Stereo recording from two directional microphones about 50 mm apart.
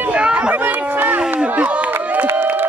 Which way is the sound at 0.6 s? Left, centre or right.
Right.